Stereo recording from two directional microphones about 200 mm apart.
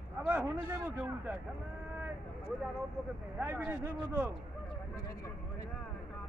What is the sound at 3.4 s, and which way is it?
Speech, 10° right (ahead or behind).